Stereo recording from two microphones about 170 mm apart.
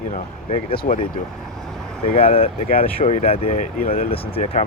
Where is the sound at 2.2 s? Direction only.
35° left (ahead or behind).